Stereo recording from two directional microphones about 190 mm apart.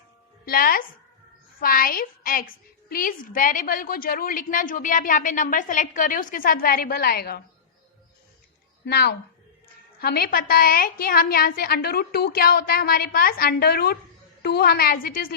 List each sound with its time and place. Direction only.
0.4 s a woman's voice: 50° left (ahead or behind)
8.8 s a woman's voice: 60° left (ahead or behind)